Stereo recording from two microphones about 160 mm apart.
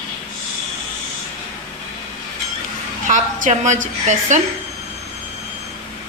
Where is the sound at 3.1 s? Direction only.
50° right (ahead or behind).